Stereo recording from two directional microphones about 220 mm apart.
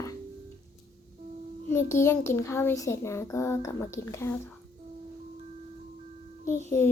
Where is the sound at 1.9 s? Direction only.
10° left (ahead or behind).